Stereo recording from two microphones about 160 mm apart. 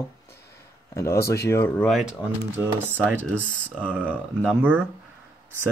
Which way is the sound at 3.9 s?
10° right (ahead or behind).